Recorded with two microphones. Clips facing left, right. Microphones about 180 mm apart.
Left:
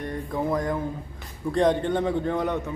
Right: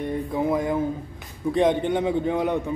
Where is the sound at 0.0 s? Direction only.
5° right (ahead or behind).